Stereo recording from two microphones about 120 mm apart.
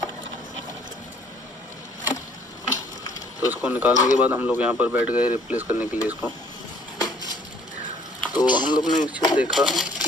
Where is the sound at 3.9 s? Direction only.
30° left (ahead or behind).